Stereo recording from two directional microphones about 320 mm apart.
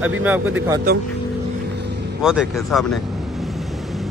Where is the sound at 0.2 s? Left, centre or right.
Centre.